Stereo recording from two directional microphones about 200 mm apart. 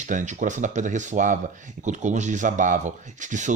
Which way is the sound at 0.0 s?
40° right (ahead or behind).